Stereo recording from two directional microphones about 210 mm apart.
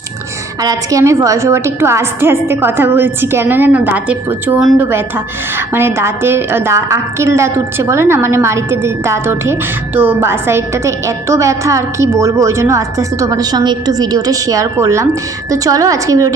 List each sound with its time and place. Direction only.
0.6 s a woman's voice: 15° right (ahead or behind)